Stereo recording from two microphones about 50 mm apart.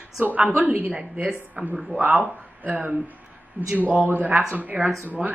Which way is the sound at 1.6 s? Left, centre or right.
Right.